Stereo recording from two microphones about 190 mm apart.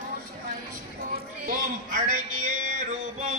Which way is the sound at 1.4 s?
45° right (ahead or behind).